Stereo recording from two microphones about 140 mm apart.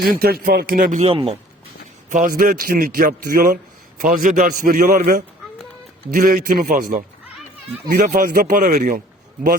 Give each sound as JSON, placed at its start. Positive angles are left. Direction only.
{"t": 0.0, "sound": "a man's voice", "side_deg": -90}
{"t": 1.0, "sound": "speech", "side_deg": -45}
{"t": 2.0, "sound": "a man's voice", "side_deg": -65}
{"t": 6.1, "sound": "a man's voice", "side_deg": -75}